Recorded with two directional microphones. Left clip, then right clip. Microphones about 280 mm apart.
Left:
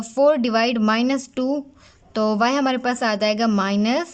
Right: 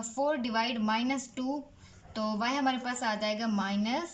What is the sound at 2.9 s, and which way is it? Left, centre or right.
A woman's voice, left.